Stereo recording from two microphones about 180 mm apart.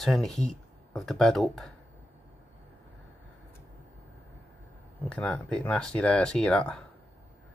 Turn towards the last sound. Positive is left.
turn(degrees=5)  # may be behind; listen again after turning